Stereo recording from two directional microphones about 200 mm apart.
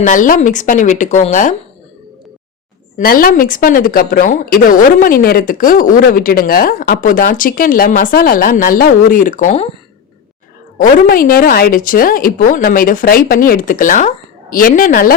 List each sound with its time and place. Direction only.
0.0 s speech: 40° left (ahead or behind)
3.0 s a woman's voice: 45° left (ahead or behind)
10.8 s a woman's voice: 45° left (ahead or behind)